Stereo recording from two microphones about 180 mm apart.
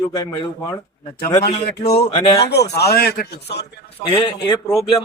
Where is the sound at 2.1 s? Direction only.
30° left (ahead or behind).